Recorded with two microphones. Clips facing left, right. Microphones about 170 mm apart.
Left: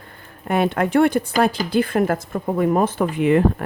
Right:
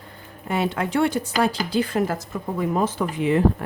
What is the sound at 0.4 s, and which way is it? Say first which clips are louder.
Speech: left 5 dB; 55° left (ahead or behind).